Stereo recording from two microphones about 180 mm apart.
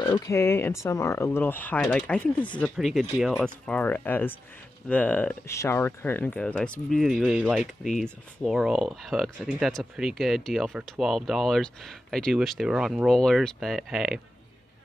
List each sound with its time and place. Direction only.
0.0 s speech: 20° left (ahead or behind); by 14.2 s 5° right (ahead or behind)